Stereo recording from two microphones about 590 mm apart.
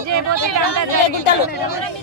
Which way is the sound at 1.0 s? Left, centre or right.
Left.